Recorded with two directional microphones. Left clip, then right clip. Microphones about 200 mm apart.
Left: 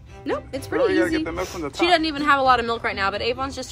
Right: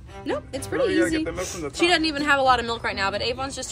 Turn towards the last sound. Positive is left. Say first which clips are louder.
# left 2 dB
turn(degrees=30)  # may be behind; listen again after turning